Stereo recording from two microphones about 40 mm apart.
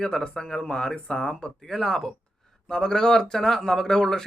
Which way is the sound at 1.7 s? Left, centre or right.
Centre.